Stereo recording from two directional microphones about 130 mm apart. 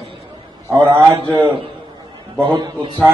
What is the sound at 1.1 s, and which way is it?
Speech, 20° right (ahead or behind).